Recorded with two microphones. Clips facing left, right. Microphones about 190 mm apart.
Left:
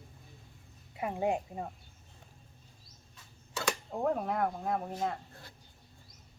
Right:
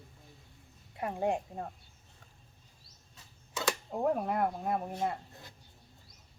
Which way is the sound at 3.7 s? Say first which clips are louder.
Right 1 dB; 10° right (ahead or behind).